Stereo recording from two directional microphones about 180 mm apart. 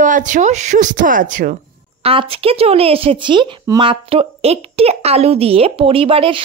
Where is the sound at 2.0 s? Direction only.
30° right (ahead or behind).